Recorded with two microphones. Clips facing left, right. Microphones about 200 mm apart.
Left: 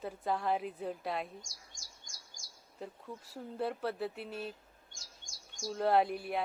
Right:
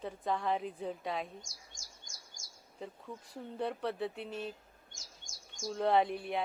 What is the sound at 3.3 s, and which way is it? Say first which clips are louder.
Speech: left 1 dB; 5° left (ahead or behind).